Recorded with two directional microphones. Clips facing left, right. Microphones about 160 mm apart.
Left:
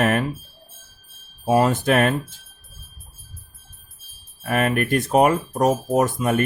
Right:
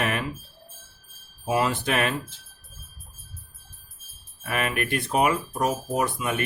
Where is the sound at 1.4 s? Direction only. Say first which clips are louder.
Left 7 dB; 45° left (ahead or behind).